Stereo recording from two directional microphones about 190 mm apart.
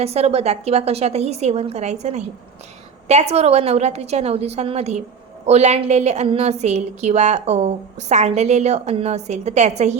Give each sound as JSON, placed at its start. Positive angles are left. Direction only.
{"t": 0.0, "sound": "a woman's voice", "side_deg": -35}